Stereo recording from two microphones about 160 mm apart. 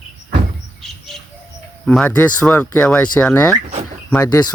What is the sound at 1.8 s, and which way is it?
Speech, 5° left (ahead or behind).